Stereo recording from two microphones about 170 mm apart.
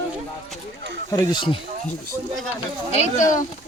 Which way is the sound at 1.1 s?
25° left (ahead or behind).